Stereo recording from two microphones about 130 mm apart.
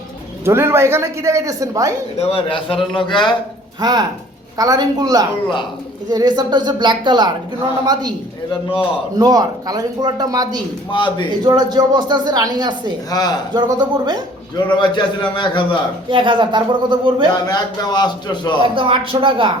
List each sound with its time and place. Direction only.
0.4 s speech: 20° right (ahead or behind)
2.1 s a man's voice: 50° left (ahead or behind)
3.8 s a woman's voice: 30° right (ahead or behind)
9.1 s speech: 30° right (ahead or behind)
10.9 s a man's voice: 40° left (ahead or behind)
11.4 s a woman's voice: 30° right (ahead or behind)
13.1 s a man's voice: 30° left (ahead or behind)
13.5 s a woman's voice: 35° right (ahead or behind)
14.7 s a man's voice: 35° left (ahead or behind)
16.0 s a woman's voice: 40° right (ahead or behind)
17.3 s a man's voice: 30° left (ahead or behind)
18.6 s speech: 45° right (ahead or behind)